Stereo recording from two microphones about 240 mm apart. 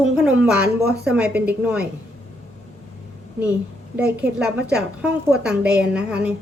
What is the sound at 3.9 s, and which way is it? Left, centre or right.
A woman's voice, centre.